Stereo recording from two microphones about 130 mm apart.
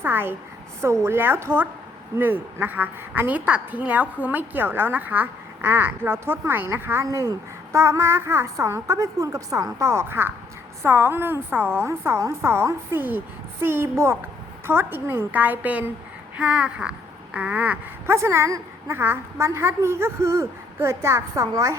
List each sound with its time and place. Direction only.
0.0 s a woman's voice: 15° right (ahead or behind)